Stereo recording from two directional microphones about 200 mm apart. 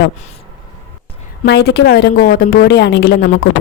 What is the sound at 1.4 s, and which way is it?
A woman's voice, 55° left (ahead or behind).